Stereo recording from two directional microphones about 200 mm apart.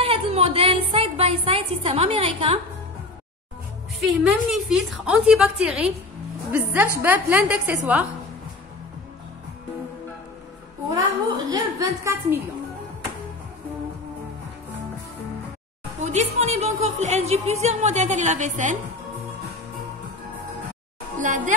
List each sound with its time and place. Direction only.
0.0 s music: 30° right (ahead or behind)
4.0 s a woman's voice: centre (ahead or behind)
10.9 s a woman's voice: 20° right (ahead or behind)
16.0 s a woman's voice: 35° right (ahead or behind)
21.2 s speech: 40° right (ahead or behind)